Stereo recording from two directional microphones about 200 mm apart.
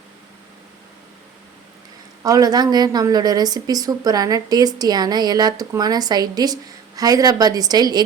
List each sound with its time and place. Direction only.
2.2 s a woman's voice: 20° right (ahead or behind)